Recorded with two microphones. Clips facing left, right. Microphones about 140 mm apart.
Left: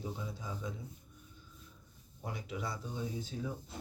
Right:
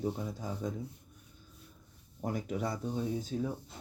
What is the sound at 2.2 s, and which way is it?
Speech, 45° right (ahead or behind).